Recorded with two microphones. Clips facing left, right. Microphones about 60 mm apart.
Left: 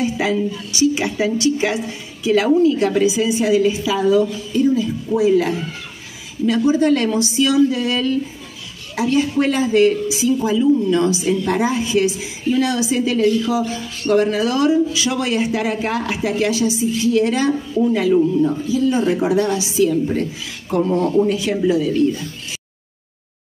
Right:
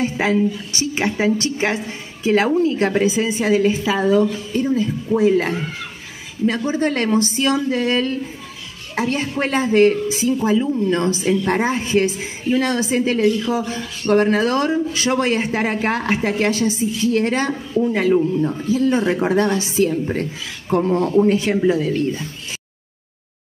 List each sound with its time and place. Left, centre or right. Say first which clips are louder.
0.0 s a woman's voice: right 1 dB; right